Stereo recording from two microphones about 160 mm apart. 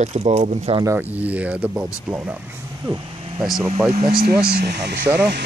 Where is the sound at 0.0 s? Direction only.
40° right (ahead or behind).